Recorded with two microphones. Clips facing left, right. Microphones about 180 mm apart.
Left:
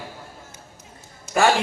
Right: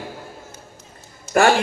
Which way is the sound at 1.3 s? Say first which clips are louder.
Right 3 dB; 55° right (ahead or behind).